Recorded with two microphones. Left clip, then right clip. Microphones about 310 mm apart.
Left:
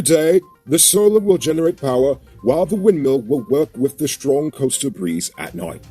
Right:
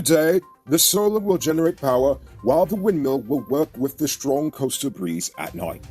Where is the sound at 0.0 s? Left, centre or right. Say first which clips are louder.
Left 4 dB; right.